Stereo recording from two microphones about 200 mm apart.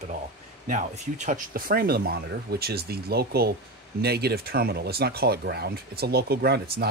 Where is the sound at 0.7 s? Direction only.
40° right (ahead or behind).